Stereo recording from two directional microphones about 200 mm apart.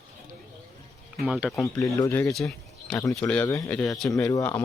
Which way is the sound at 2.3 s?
Centre (ahead or behind).